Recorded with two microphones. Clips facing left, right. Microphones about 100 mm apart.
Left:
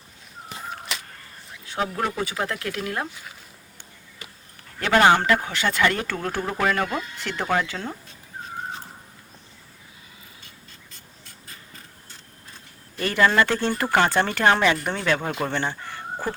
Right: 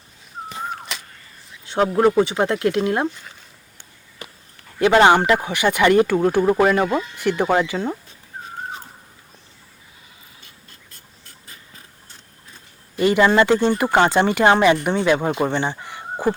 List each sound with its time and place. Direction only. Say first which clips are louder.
0.9 s a sound: even; centre (ahead or behind)
1.6 s a sound: right 8 dB; 25° right (ahead or behind)
1.9 s speech: right 11 dB; 35° right (ahead or behind)
3.1 s speech: right 3 dB; 5° left (ahead or behind)
4.8 s speech: right 4 dB; 20° right (ahead or behind)
13.0 s speech: right 5 dB; 15° right (ahead or behind)
15.4 s chicken: right 4 dB; 15° right (ahead or behind)